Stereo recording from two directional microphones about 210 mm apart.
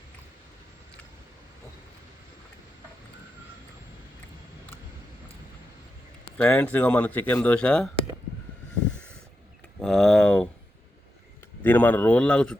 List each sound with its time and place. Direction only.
6.3 s speech: 5° left (ahead or behind)
9.8 s a sound: centre (ahead or behind)
11.6 s speech: 10° left (ahead or behind)